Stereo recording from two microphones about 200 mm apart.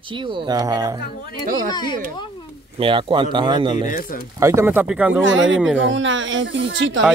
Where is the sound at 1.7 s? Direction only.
20° left (ahead or behind).